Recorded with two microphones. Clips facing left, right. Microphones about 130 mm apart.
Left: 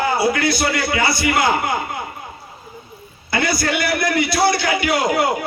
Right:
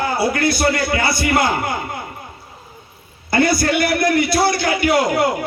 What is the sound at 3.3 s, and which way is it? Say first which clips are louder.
Speech: right 4 dB; 50° right (ahead or behind).